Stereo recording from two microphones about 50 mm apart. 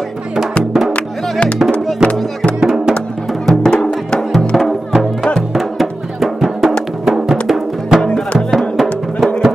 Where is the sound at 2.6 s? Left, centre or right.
Centre.